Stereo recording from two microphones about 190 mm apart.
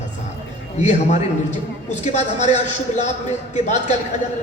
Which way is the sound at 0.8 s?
40° left (ahead or behind).